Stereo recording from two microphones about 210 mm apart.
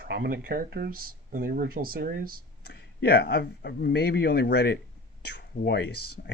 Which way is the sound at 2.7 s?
50° left (ahead or behind).